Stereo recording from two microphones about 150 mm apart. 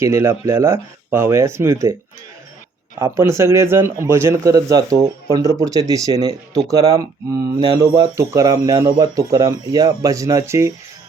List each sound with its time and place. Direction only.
0.0 s speech: 15° right (ahead or behind)
3.0 s speech: 20° right (ahead or behind)